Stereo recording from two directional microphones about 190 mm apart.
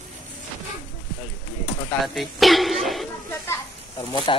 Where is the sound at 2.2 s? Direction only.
Centre (ahead or behind).